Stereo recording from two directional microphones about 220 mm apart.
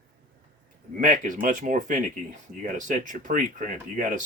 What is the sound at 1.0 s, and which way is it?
Speech, 35° right (ahead or behind).